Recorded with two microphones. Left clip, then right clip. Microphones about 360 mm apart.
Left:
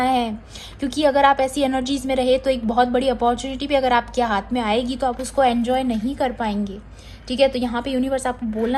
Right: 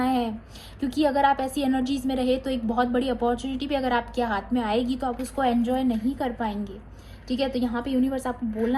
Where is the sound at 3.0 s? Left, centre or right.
Left.